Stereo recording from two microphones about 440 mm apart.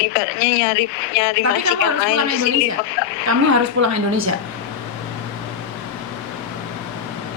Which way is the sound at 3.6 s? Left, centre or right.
Right.